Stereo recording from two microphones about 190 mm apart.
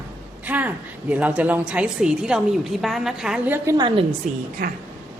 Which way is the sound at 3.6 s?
20° right (ahead or behind).